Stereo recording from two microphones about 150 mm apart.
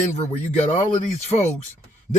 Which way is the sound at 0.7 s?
55° left (ahead or behind).